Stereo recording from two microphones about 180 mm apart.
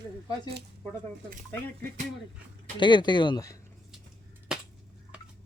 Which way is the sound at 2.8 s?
25° left (ahead or behind).